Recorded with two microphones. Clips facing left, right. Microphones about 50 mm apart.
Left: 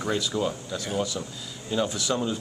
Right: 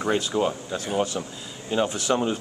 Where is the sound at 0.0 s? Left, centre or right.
Right.